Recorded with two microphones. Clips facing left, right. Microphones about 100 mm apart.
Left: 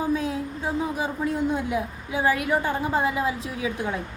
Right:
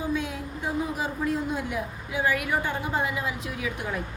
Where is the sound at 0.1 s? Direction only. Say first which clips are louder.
Left 4 dB; 35° left (ahead or behind).